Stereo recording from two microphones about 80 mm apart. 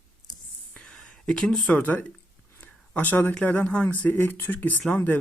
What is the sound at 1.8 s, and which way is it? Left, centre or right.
Speech, left.